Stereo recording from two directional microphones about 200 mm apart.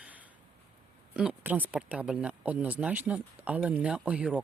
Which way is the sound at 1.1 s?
5° right (ahead or behind).